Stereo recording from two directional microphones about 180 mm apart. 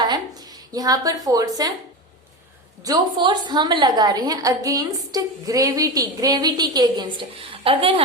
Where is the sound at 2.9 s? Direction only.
25° right (ahead or behind).